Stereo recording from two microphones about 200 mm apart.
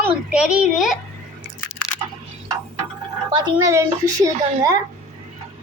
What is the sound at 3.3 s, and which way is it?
A woman's voice, 20° right (ahead or behind).